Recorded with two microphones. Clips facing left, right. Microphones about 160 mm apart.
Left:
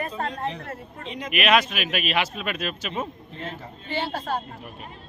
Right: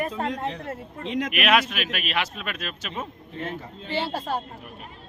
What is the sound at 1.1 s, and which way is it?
Speech, 90° right.